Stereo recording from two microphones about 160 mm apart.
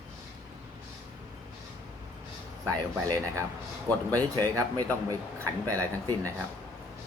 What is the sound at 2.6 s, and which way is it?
Speech, 20° right (ahead or behind).